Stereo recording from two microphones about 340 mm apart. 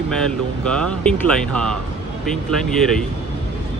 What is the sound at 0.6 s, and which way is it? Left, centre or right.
Speech, centre.